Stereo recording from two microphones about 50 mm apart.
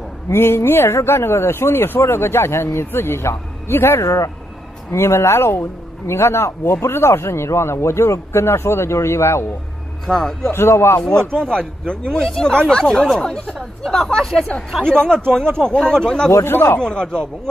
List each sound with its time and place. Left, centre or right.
0.3 s speech: left
10.0 s speech: centre
10.5 s speech: left
11.2 s speech: centre
16.4 s a man's voice: left
16.8 s speech: centre